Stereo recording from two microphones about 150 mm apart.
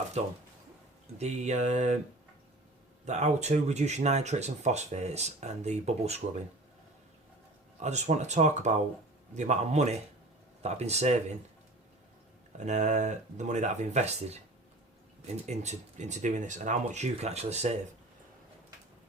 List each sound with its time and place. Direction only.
0.2 s speech: 45° right (ahead or behind)
3.1 s speech: 50° right (ahead or behind)
7.8 s speech: 50° right (ahead or behind)
12.5 s speech: 55° right (ahead or behind)
15.4 s speech: 50° right (ahead or behind)